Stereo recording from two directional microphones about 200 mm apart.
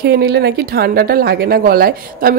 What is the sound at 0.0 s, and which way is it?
A woman's voice, 55° right (ahead or behind).